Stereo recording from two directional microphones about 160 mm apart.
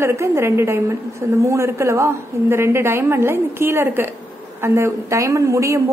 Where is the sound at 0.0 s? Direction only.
15° right (ahead or behind).